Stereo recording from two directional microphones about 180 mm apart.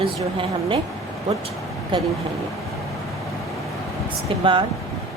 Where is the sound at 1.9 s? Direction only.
25° right (ahead or behind).